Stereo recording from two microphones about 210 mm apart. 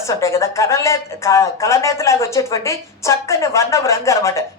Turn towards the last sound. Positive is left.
turn(degrees=15)  # may be behind; listen again after turning